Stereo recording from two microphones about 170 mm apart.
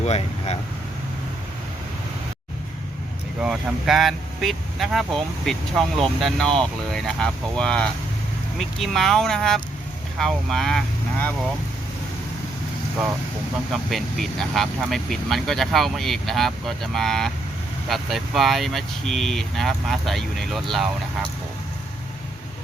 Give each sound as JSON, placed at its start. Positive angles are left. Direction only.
{"t": 0.0, "sound": "speech", "side_deg": 40}
{"t": 3.4, "sound": "speech", "side_deg": -5}
{"t": 13.9, "sound": "speech", "side_deg": 0}